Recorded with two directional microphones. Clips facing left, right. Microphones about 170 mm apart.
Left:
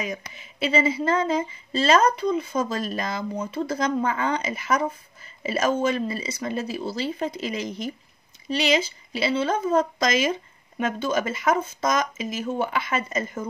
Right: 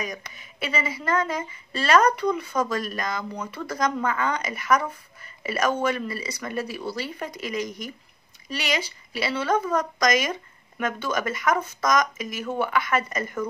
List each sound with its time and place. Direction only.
0.4 s a woman's voice: 25° left (ahead or behind)